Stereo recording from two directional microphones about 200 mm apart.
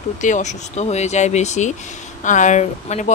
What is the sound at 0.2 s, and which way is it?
Speech, 35° left (ahead or behind).